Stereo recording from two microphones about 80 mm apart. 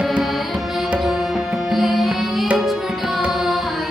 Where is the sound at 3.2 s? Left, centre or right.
Centre.